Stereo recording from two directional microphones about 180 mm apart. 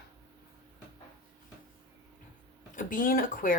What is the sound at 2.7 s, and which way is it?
Speech, 50° left (ahead or behind).